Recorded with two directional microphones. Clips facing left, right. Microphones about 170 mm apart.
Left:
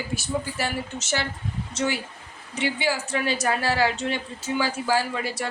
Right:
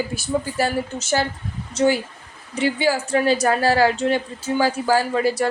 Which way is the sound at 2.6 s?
40° right (ahead or behind).